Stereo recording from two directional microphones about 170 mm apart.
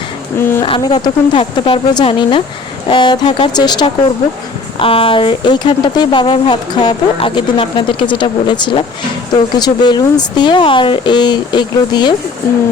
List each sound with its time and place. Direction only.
0.3 s speech: 15° left (ahead or behind)
0.6 s speech: 25° left (ahead or behind)